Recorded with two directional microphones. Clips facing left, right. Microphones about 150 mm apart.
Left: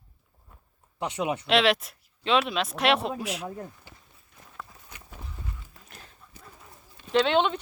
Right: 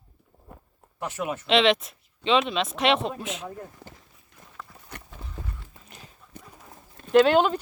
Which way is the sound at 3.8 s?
90° right.